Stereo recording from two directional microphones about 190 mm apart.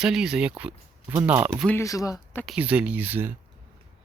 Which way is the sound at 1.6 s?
15° left (ahead or behind).